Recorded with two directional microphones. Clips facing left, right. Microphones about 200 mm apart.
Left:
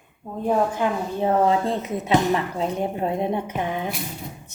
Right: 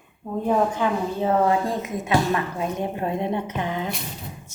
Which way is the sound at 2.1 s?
20° left (ahead or behind).